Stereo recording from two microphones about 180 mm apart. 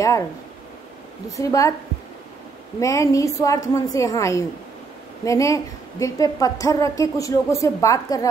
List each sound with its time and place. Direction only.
1.3 s a woman's voice: 20° left (ahead or behind)
2.8 s a woman's voice: 15° left (ahead or behind)